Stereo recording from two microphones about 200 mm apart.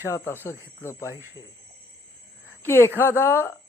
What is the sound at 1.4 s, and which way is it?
Speech, 25° left (ahead or behind).